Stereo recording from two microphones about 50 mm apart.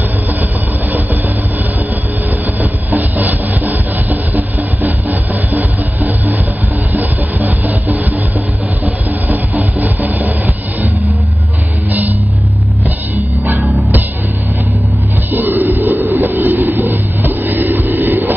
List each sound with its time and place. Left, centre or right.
2.6 s a sound: right
6.9 s music: right
8.8 s a sound: right
11.9 s music: right
13.6 s music: right
15.3 s vehicle: right